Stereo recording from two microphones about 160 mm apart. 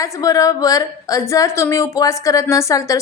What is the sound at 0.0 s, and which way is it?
A woman's voice, 20° left (ahead or behind).